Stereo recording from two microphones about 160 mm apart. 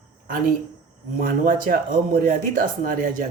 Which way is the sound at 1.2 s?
60° right (ahead or behind).